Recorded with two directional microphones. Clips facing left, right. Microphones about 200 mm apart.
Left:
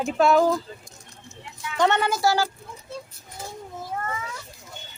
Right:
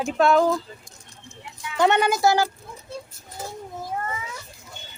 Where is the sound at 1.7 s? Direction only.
10° right (ahead or behind).